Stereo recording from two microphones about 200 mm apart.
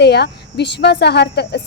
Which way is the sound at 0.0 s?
55° left (ahead or behind).